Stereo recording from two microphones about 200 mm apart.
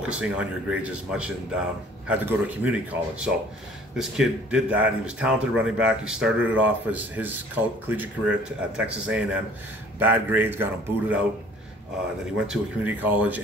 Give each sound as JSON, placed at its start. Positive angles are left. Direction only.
{"t": 0.0, "sound": "speech", "side_deg": -5}
{"t": 12.4, "sound": "speech", "side_deg": -10}